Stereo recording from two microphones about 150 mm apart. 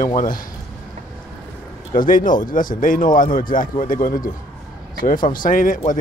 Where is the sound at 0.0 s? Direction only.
65° left (ahead or behind).